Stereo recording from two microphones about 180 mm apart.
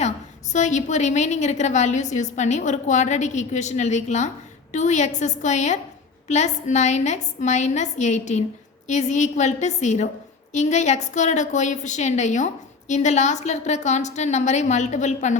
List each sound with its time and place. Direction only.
0.0 s a woman's voice: 40° left (ahead or behind)